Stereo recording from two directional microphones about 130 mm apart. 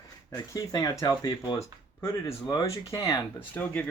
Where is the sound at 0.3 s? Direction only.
25° left (ahead or behind).